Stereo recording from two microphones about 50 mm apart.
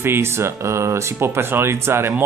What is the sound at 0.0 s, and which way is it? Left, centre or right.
Speech, right.